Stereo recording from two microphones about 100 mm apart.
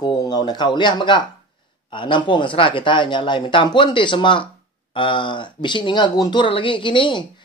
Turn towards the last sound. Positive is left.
turn(degrees=55)  # may be behind; listen again after turning